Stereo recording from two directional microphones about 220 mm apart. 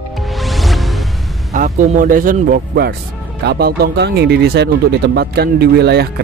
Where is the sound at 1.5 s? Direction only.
35° right (ahead or behind).